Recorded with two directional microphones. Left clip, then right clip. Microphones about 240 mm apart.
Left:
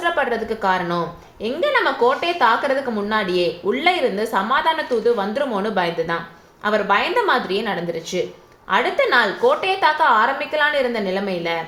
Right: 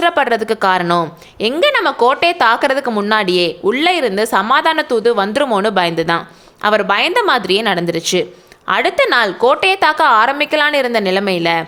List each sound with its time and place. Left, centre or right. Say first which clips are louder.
0.0 s a woman's voice: right 7 dB; right